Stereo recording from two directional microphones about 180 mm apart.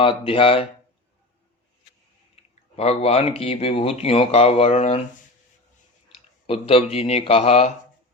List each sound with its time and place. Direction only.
0.0 s speech: 30° left (ahead or behind)
2.3 s speech: 35° left (ahead or behind)
6.5 s speech: 30° left (ahead or behind)